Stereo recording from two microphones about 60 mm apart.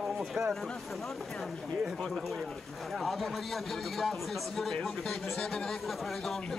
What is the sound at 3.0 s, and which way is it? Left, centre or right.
Speech, centre.